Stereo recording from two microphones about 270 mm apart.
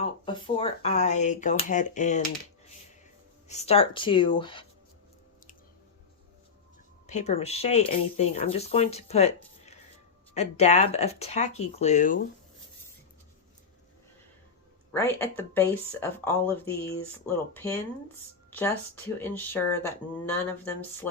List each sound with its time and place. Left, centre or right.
0.0 s speech: centre
3.5 s speech: left
7.1 s speech: left
14.9 s speech: centre